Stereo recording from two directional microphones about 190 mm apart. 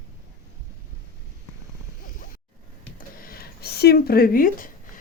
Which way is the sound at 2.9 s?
50° left (ahead or behind).